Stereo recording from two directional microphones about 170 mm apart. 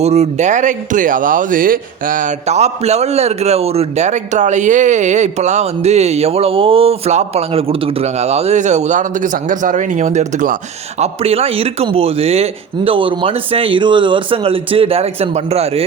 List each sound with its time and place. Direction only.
0.0 s speech: 40° right (ahead or behind)
11.0 s a man's voice: 35° right (ahead or behind)